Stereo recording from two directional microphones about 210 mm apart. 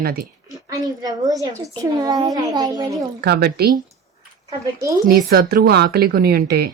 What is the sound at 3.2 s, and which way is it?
Speech, 50° right (ahead or behind).